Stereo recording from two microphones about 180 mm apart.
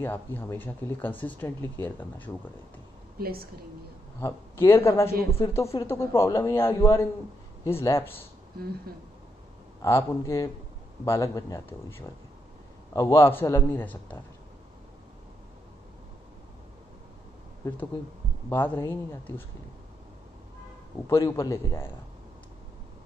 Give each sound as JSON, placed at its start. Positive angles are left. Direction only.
{"t": 0.0, "sound": "a man's voice", "side_deg": 10}
{"t": 3.2, "sound": "a woman's voice", "side_deg": -60}
{"t": 4.2, "sound": "a man's voice", "side_deg": 15}
{"t": 9.8, "sound": "a man's voice", "side_deg": 15}
{"t": 17.6, "sound": "a man's voice", "side_deg": 15}
{"t": 21.1, "sound": "a man's voice", "side_deg": 15}